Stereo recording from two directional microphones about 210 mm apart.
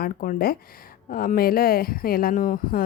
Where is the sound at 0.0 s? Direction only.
45° left (ahead or behind).